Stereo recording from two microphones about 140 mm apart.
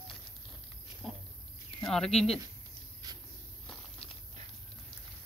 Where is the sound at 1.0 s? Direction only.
Centre (ahead or behind).